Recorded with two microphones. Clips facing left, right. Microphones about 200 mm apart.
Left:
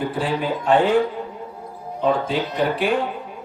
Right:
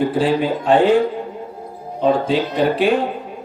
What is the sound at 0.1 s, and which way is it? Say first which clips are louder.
Speech: right 6 dB; 30° right (ahead or behind).